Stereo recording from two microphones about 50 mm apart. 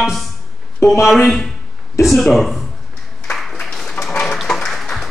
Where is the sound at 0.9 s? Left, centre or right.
Centre.